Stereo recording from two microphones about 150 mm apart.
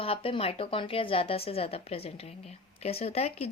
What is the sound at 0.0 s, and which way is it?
A woman's voice, 35° left (ahead or behind).